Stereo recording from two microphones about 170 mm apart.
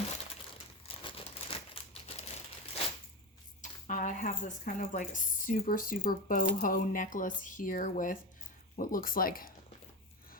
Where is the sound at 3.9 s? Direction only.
45° left (ahead or behind).